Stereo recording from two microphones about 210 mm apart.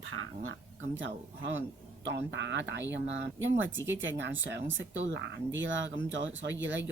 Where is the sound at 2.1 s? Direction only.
60° right (ahead or behind).